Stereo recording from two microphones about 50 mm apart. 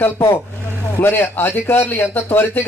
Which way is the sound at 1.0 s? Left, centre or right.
Left.